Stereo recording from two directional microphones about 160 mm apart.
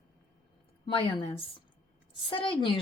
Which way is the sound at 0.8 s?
35° left (ahead or behind).